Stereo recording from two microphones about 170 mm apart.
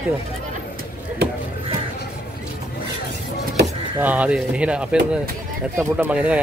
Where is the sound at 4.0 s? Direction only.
10° right (ahead or behind).